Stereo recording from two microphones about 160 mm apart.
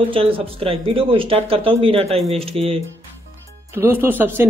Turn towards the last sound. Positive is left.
turn(degrees=-15)  # may be behind; listen again after turning